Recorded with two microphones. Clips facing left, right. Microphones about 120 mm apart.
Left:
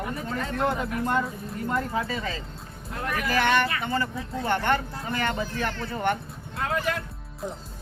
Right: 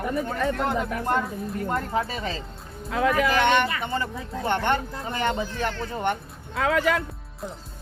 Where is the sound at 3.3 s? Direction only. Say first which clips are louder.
Right 2 dB; 20° right (ahead or behind).